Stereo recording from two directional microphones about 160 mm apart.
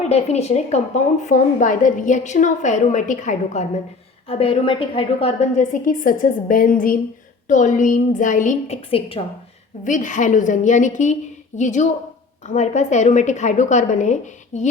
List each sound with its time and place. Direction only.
0.1 s a woman's voice: 40° left (ahead or behind)
4.3 s a woman's voice: 35° left (ahead or behind)
9.8 s a woman's voice: 50° left (ahead or behind)